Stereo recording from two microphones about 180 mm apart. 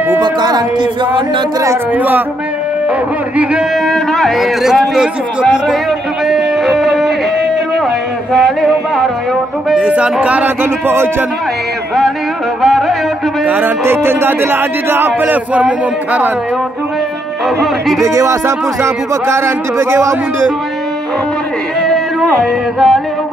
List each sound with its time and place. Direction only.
0.2 s speech: 25° right (ahead or behind)
3.3 s a man's voice: centre (ahead or behind)
6.2 s music: centre (ahead or behind)
8.3 s music: centre (ahead or behind)
9.7 s speech: 5° right (ahead or behind)
12.6 s a sound: centre (ahead or behind)
13.5 s speech: 10° right (ahead or behind)
17.6 s a man's voice: centre (ahead or behind)
18.0 s speech: 15° right (ahead or behind)
21.8 s a sound: centre (ahead or behind)